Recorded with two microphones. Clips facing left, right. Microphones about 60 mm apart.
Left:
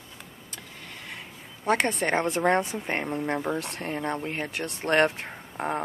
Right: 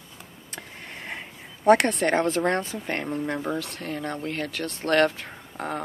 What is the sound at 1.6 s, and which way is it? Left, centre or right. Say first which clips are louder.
Speech: right 6 dB; centre.